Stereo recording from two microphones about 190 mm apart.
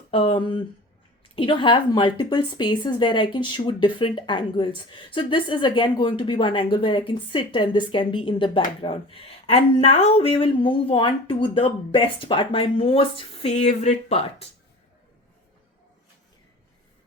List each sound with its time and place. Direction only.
0.1 s a woman's voice: 30° left (ahead or behind)